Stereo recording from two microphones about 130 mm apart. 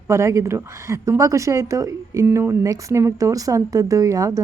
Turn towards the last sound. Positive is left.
turn(degrees=-25)  # may be behind; listen again after turning